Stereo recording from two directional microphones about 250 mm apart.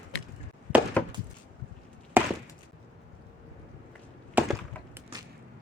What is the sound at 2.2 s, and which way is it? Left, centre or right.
Chop, centre.